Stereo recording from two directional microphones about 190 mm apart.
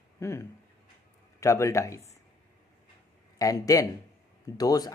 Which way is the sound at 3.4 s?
15° left (ahead or behind).